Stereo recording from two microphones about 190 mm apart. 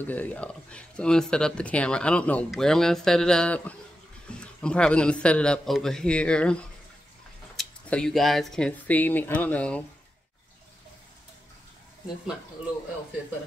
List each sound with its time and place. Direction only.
0.0 s speech: 10° left (ahead or behind)